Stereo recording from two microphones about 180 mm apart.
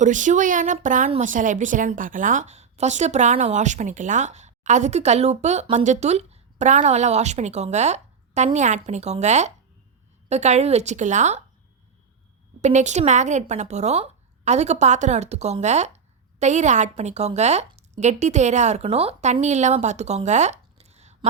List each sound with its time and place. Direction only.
0.0 s a woman's voice: 45° right (ahead or behind)
12.6 s speech: 40° right (ahead or behind)